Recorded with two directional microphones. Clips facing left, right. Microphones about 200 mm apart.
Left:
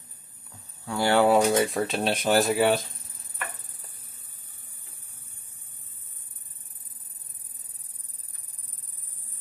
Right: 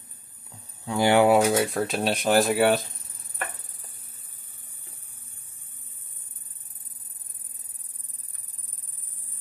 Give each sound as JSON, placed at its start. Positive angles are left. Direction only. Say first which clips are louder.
{"t": 0.8, "sound": "speech", "louder": "right 2 dB", "side_deg": -15}